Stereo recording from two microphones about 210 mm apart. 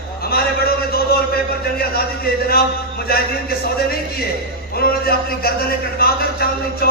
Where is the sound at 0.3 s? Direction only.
45° left (ahead or behind).